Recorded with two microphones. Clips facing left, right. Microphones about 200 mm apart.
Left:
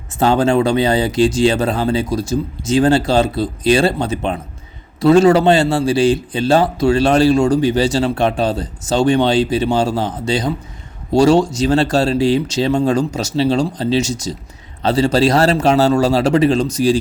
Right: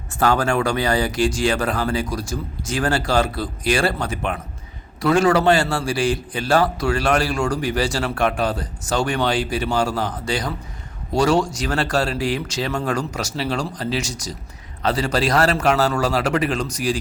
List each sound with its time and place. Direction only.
0.2 s a man's voice: 25° left (ahead or behind)